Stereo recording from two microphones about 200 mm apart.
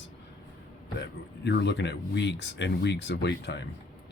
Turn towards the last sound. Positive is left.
turn(degrees=55)  # may be behind; listen again after turning